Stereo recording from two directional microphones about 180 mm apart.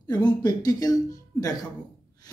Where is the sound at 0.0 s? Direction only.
25° left (ahead or behind).